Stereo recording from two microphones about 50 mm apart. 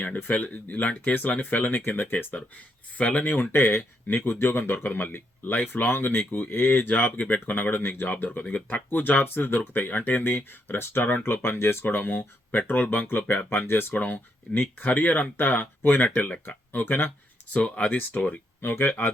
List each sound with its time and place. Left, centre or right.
0.0 s speech: left
3.2 s speech: left
16.0 s speech: left
16.8 s speech: left
17.5 s speech: left